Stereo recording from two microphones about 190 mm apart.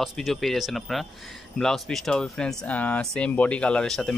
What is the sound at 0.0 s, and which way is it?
Speech, centre (ahead or behind).